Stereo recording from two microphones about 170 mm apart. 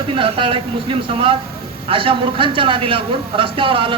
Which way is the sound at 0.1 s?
30° right (ahead or behind).